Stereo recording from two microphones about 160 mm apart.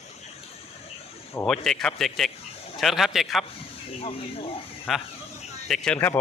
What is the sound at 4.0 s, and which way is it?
Speech, 35° left (ahead or behind).